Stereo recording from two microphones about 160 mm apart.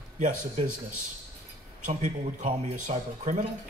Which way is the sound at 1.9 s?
50° right (ahead or behind).